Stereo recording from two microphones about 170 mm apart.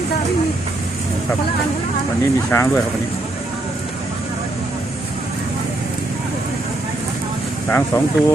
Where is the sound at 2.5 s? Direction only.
15° left (ahead or behind).